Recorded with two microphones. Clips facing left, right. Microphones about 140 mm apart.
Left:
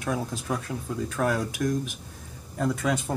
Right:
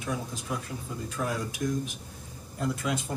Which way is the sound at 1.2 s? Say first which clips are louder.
Left 5 dB; 90° left.